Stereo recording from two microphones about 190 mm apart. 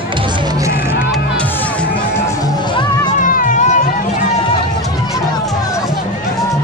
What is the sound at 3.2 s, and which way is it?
Music, 45° left (ahead or behind).